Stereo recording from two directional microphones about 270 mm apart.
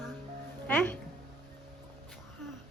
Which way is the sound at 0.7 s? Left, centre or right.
Centre.